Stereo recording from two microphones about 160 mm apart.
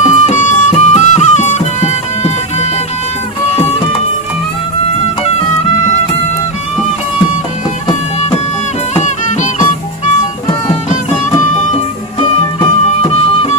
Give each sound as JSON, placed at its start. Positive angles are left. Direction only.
{"t": 0.0, "sound": "music", "side_deg": 50}
{"t": 8.9, "sound": "music", "side_deg": 50}
{"t": 10.9, "sound": "music", "side_deg": 45}